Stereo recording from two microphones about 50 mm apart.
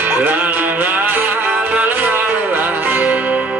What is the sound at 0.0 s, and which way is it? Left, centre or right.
Music, right.